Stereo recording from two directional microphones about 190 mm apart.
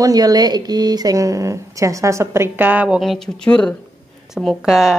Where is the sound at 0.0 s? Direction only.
20° right (ahead or behind).